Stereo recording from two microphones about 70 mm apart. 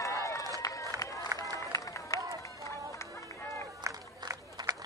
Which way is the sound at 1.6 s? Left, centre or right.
Left.